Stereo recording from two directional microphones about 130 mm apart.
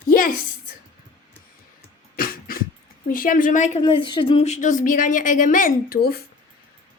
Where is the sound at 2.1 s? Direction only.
90° left.